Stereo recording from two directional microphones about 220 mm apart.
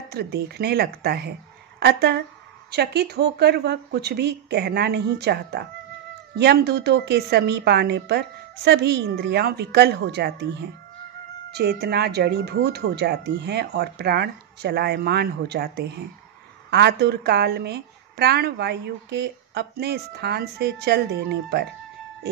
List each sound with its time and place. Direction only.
0.1 s a woman's voice: 45° right (ahead or behind)